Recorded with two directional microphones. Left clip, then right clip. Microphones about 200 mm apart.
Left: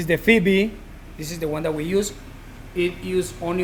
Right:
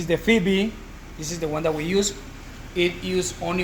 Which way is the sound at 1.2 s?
35° left (ahead or behind).